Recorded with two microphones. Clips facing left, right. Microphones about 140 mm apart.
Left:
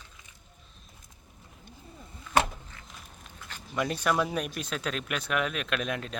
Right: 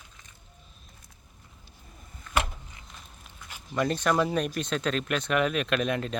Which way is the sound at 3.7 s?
5° left (ahead or behind).